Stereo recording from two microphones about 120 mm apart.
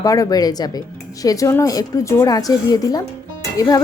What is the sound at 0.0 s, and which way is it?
A woman's voice, 30° left (ahead or behind).